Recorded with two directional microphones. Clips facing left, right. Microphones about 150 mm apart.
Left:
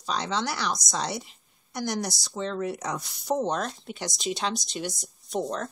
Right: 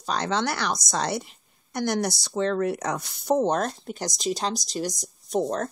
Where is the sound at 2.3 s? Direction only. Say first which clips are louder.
Right 6 dB; 65° right (ahead or behind).